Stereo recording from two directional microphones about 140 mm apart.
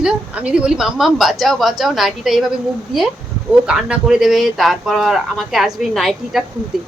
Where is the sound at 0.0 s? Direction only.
10° right (ahead or behind).